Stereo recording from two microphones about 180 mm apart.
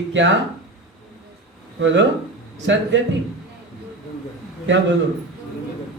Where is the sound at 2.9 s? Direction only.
90° right.